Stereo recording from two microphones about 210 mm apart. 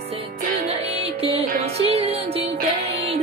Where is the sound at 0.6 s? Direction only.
30° right (ahead or behind).